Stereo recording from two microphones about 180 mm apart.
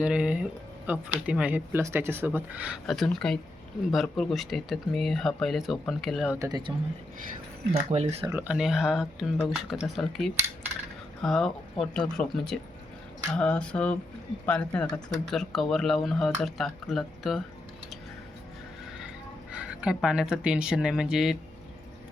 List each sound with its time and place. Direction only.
0.0 s speech: 5° right (ahead or behind)
6.4 s speech: 25° right (ahead or behind)
7.7 s speech: 45° right (ahead or behind)
8.3 s speech: 10° right (ahead or behind)
19.5 s speech: 5° right (ahead or behind)